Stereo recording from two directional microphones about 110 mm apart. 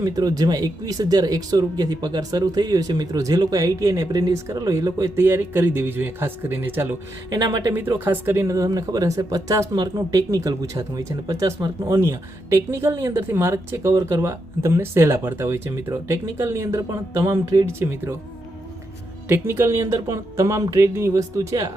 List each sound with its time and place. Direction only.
0.0 s speech: 35° right (ahead or behind); by 6.8 s 20° right (ahead or behind)
7.3 s speech: 40° right (ahead or behind)
7.7 s speech: 20° right (ahead or behind)
19.3 s speech: 20° right (ahead or behind)